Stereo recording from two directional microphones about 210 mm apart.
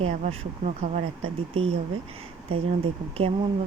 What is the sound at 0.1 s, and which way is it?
Speech, 30° right (ahead or behind).